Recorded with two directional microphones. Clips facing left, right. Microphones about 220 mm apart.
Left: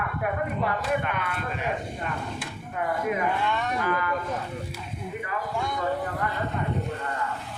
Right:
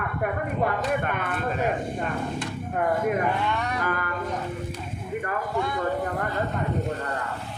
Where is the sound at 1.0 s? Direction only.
50° right (ahead or behind).